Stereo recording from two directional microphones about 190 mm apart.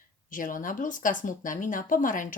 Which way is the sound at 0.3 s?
45° left (ahead or behind).